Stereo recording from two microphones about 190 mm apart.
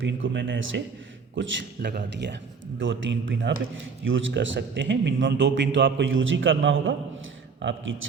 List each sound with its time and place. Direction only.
0.0 s speech: 80° right
1.4 s speech: 60° right (ahead or behind); by 3.5 s 80° right
3.8 s speech: 90° right; by 7.9 s 75° right (ahead or behind)